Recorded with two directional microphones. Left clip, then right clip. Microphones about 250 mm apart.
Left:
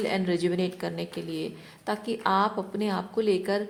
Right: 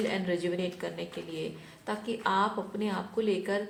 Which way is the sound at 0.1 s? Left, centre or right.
Left.